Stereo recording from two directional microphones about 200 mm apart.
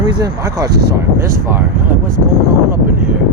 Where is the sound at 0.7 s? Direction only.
55° right (ahead or behind).